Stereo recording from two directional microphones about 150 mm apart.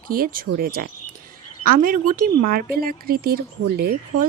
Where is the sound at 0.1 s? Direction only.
70° right (ahead or behind).